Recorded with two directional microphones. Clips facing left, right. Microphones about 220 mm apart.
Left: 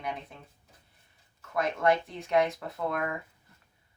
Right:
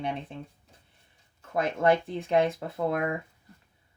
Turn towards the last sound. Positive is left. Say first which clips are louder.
# right 4 dB
turn(degrees=-30)  # may be behind; listen again after turning